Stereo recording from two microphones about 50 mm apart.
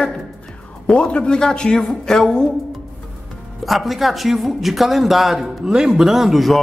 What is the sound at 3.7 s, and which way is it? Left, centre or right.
Speech, centre.